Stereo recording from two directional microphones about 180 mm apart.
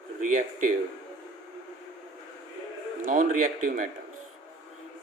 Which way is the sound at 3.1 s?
45° right (ahead or behind).